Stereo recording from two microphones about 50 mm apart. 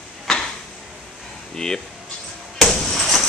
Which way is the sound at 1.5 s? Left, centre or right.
Centre.